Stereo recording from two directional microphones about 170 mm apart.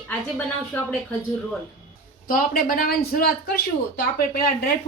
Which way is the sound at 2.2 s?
55° left (ahead or behind).